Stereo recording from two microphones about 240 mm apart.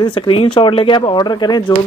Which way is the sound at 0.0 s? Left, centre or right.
Left.